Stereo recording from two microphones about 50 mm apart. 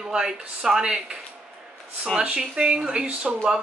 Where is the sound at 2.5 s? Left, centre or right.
Centre.